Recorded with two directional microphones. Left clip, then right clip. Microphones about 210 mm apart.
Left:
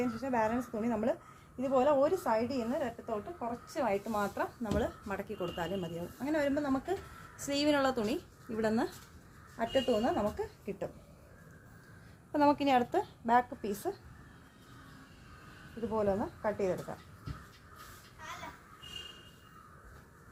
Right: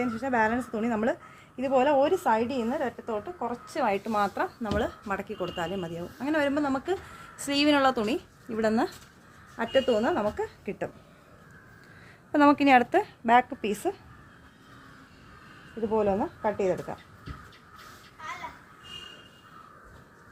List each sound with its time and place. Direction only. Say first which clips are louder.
0.0 s a woman's voice: right 6 dB; 45° right (ahead or behind); by 5.9 s 30° right (ahead or behind)
6.1 s a woman's voice: right 6 dB; 45° right (ahead or behind)
9.6 s a woman's voice: right 6 dB; 45° right (ahead or behind)
12.3 s a woman's voice: right 8 dB; 40° right (ahead or behind)
15.9 s a woman's voice: right 6 dB; 40° right (ahead or behind)